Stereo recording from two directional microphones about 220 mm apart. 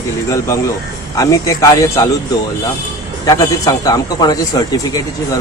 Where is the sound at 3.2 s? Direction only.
15° left (ahead or behind).